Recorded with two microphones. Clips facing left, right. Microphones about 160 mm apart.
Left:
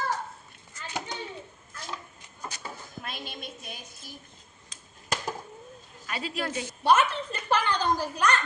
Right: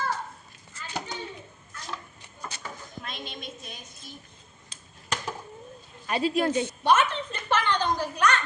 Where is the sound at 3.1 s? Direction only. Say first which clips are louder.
Right 1 dB; 10° left (ahead or behind).